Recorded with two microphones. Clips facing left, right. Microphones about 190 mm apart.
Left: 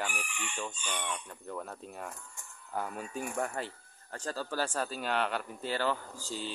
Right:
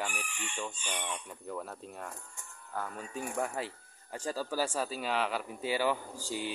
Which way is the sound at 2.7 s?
15° left (ahead or behind).